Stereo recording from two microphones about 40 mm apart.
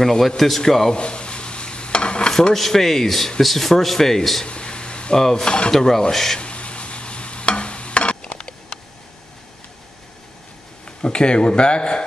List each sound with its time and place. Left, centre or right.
0.0 s speech: centre
0.9 s stir: left
2.5 s speech: centre
4.5 s a sound: left
5.1 s speech: centre
5.7 s speech: centre
6.4 s stir: left
8.4 s a sound: left
10.9 s speech: left